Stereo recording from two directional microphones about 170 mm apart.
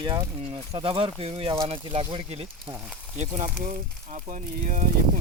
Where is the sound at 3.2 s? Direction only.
45° right (ahead or behind).